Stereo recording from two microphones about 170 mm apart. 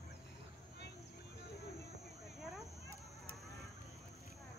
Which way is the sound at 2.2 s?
Centre (ahead or behind).